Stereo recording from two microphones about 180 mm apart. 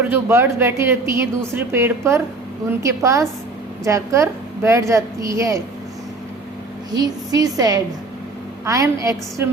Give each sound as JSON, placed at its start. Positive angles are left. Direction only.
{"t": 0.0, "sound": "a woman's voice", "side_deg": -15}
{"t": 6.9, "sound": "a woman's voice", "side_deg": -20}